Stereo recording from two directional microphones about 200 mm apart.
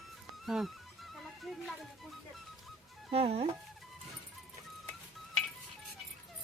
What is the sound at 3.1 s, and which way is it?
Speech, 30° right (ahead or behind).